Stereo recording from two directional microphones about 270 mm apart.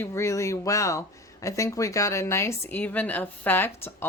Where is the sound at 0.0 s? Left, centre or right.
Centre.